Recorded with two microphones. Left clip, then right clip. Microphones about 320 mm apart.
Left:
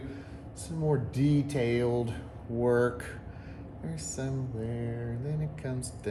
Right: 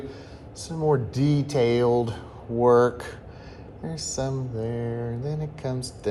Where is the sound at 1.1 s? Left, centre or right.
Centre.